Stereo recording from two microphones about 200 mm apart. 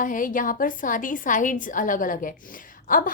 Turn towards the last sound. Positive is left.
turn(degrees=45)  # may be behind; listen again after turning